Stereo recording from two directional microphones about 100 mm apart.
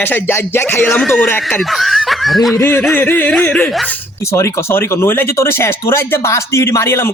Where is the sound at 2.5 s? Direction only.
25° left (ahead or behind).